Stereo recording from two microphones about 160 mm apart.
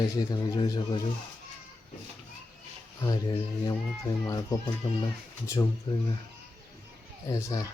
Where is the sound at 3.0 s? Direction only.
25° left (ahead or behind).